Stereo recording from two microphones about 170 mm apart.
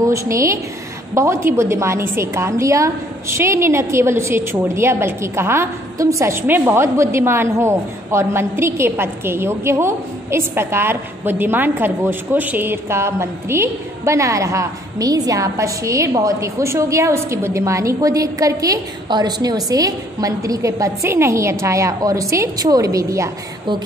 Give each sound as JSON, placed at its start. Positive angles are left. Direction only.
{"t": 0.0, "sound": "a woman's voice", "side_deg": -20}